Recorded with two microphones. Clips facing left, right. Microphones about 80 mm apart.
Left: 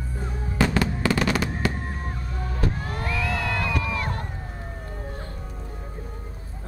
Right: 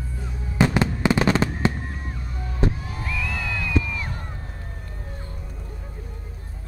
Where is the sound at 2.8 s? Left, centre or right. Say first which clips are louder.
Left 2 dB; left.